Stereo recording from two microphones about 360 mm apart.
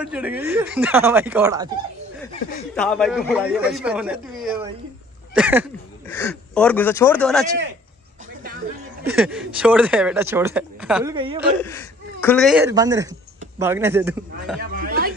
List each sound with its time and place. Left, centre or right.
0.0 s speech: centre
2.7 s speech: centre
9.2 s speech: centre
11.1 s a man's voice: centre
11.6 s a man's voice: centre
14.6 s speech: right